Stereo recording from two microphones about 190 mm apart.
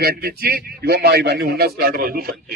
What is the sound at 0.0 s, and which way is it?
A man's voice, 55° right (ahead or behind).